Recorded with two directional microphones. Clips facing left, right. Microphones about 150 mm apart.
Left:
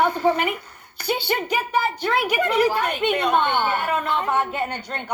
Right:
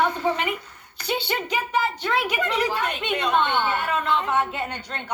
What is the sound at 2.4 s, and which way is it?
A woman's voice, 50° left (ahead or behind).